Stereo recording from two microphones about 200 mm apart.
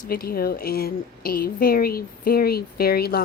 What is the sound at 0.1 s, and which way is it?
A woman's voice, 50° left (ahead or behind).